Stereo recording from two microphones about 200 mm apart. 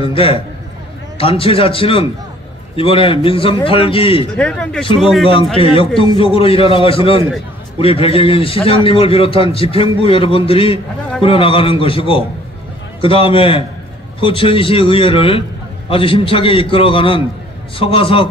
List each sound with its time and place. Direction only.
0.0 s a man's voice: 25° left (ahead or behind)
4.4 s speech: 5° left (ahead or behind)
5.3 s a man's voice: 25° left (ahead or behind)